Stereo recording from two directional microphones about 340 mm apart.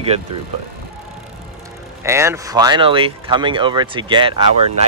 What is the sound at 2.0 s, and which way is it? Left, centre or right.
Speech, centre.